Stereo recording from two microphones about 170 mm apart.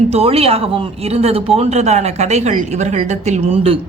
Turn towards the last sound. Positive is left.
turn(degrees=-35)  # may be behind; listen again after turning